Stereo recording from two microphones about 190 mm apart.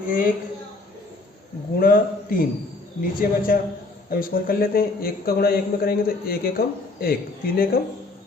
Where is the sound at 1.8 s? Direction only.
50° left (ahead or behind).